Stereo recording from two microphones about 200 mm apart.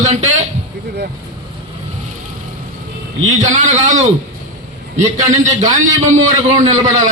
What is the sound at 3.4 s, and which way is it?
A man's voice, 40° right (ahead or behind).